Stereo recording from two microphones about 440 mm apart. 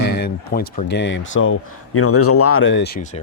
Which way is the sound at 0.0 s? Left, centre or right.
Left.